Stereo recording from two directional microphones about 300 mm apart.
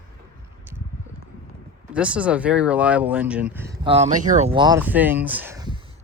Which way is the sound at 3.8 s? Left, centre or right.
Centre.